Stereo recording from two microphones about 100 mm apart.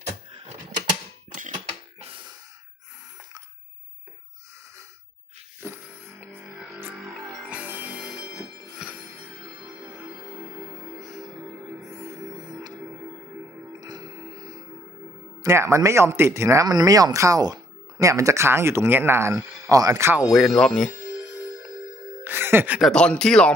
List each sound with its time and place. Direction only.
2.0 s a sound: 70° right (ahead or behind)
5.5 s a sound: 25° right (ahead or behind)
6.7 s music: 20° right (ahead or behind)
6.9 s music: 5° right (ahead or behind)
7.4 s music: 15° right (ahead or behind)
11.9 s music: 40° right (ahead or behind)
13.7 s music: 45° right (ahead or behind)
15.4 s speech: 30° right (ahead or behind)
20.1 s speech: centre (ahead or behind)
20.9 s music: 15° right (ahead or behind)
22.8 s speech: 10° left (ahead or behind)